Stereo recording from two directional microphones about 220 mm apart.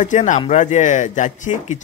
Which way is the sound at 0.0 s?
35° left (ahead or behind).